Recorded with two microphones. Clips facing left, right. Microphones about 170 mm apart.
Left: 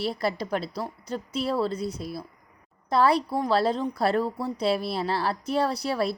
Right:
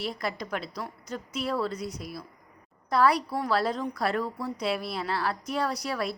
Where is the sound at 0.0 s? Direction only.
30° left (ahead or behind).